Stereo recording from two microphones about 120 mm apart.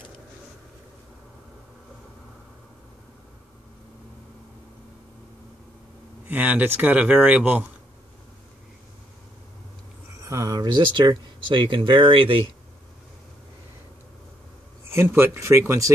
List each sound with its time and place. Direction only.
6.2 s speech: 15° right (ahead or behind)
10.2 s a sound: 25° right (ahead or behind)
11.0 s speech: 45° right (ahead or behind)
14.9 s speech: 20° right (ahead or behind)